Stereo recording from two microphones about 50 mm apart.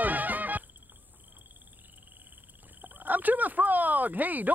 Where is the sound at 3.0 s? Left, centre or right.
Right.